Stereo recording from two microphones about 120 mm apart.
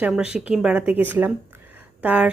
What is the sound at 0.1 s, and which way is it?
A woman's voice, 5° right (ahead or behind).